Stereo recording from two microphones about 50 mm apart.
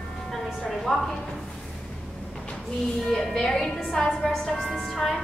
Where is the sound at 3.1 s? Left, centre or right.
Centre.